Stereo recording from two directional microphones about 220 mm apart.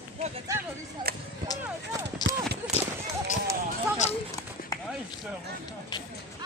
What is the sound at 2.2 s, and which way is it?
Clip-clop, 20° left (ahead or behind).